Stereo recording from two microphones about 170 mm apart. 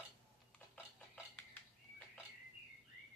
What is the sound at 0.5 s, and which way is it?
Cutlery, 5° left (ahead or behind).